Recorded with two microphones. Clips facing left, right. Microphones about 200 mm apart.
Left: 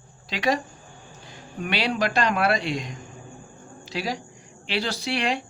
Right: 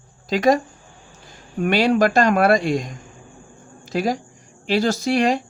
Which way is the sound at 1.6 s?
45° right (ahead or behind).